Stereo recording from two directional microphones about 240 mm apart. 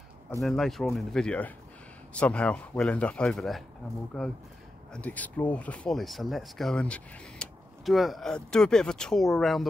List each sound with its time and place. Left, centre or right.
0.4 s speech: centre